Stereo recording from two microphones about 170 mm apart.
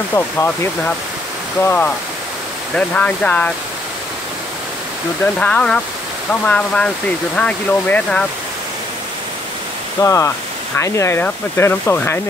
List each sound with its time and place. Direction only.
0.1 s speech: 15° left (ahead or behind)
5.2 s speech: 5° left (ahead or behind)
9.9 s speech: 15° left (ahead or behind)